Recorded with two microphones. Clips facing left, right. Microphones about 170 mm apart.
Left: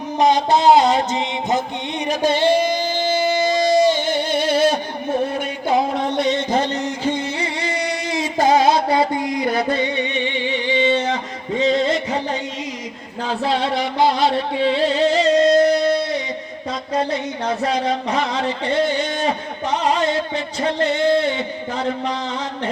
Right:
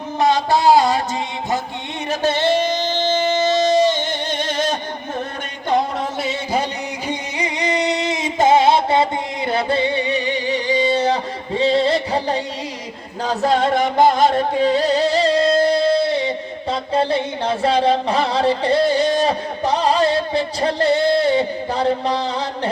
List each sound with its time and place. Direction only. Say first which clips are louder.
0.2 s music: left 1 dB; 15° left (ahead or behind)
2.0 s singing: left 1 dB; 15° left (ahead or behind)
6.1 s music: left 4 dB; 5° right (ahead or behind); by 12.4 s 35° right (ahead or behind)
13.2 s music: right 3 dB; 45° right (ahead or behind)